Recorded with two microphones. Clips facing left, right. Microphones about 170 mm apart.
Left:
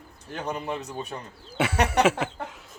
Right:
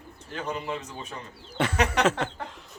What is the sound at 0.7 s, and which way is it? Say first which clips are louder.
Speech: left 2 dB; 65° left (ahead or behind).